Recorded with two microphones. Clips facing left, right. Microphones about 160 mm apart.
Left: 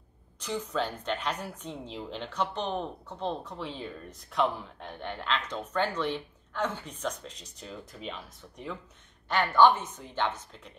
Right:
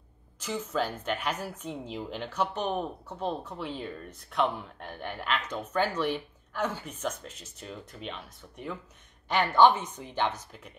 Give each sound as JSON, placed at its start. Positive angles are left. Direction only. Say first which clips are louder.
{"t": 0.4, "sound": "a woman's voice", "louder": "right 1 dB", "side_deg": -5}
{"t": 9.3, "sound": "a woman's voice", "louder": "right 1 dB", "side_deg": -15}